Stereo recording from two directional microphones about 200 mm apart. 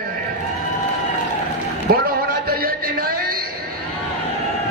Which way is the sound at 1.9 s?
50° right (ahead or behind).